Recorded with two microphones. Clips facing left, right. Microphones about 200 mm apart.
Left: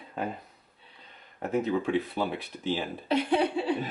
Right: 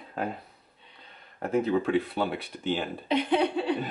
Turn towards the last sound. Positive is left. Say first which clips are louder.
# right 1 dB
turn(degrees=5)  # may be behind; listen again after turning